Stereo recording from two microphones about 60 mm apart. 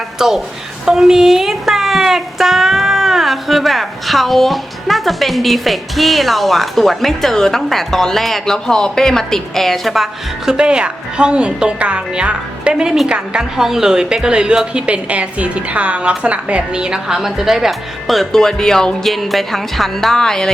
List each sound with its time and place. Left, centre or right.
0.2 s a woman's voice: centre